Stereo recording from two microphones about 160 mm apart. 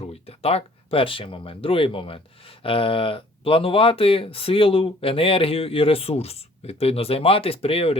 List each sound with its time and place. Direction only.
0.0 s speech: 40° left (ahead or behind)